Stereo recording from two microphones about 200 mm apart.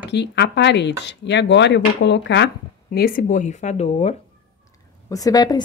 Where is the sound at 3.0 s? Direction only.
45° left (ahead or behind).